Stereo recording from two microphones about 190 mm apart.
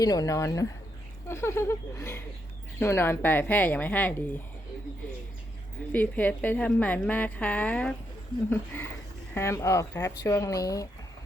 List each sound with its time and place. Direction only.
0.0 s a woman's voice: 20° left (ahead or behind)
5.9 s a woman's voice: 10° left (ahead or behind)